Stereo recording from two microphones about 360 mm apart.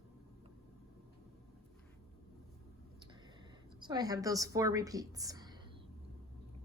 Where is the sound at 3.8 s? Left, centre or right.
Centre.